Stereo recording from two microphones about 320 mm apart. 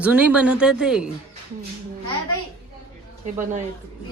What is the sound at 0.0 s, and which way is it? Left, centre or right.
A woman's voice, centre.